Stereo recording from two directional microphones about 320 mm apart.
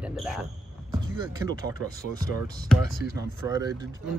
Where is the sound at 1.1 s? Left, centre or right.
Centre.